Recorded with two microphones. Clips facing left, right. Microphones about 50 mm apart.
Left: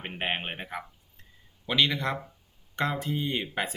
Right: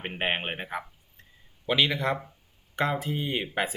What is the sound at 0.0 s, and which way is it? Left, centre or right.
Speech, centre.